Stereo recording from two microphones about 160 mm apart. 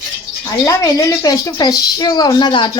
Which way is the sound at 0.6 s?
20° left (ahead or behind).